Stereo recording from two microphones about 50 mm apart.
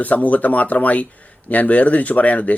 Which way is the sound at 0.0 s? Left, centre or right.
Left.